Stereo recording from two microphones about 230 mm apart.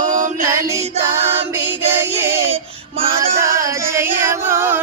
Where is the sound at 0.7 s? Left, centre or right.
Centre.